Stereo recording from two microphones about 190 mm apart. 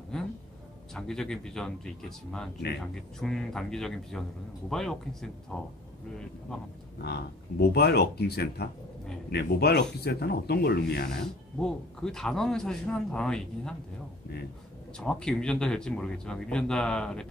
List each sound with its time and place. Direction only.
0.9 s speech: 5° left (ahead or behind)
7.0 s speech: 60° left (ahead or behind)
11.6 s speech: 5° left (ahead or behind)
15.0 s speech: 5° left (ahead or behind)